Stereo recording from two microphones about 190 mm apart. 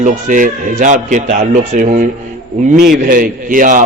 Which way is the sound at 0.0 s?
45° right (ahead or behind).